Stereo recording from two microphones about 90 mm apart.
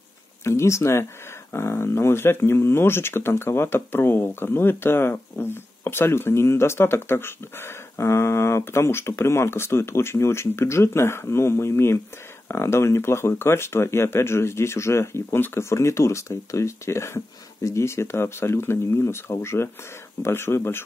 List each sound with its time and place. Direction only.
0.4 s speech: 30° left (ahead or behind)